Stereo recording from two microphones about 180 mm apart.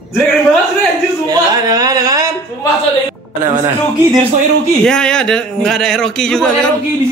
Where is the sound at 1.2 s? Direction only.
20° right (ahead or behind).